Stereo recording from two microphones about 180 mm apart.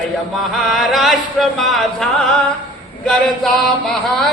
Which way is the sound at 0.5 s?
Centre (ahead or behind).